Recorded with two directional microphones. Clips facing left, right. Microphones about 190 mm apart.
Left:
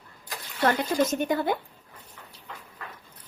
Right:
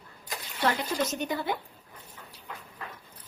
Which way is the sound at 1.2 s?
50° left (ahead or behind).